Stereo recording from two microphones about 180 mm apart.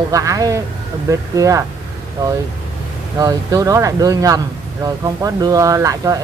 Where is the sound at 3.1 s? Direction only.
20° right (ahead or behind).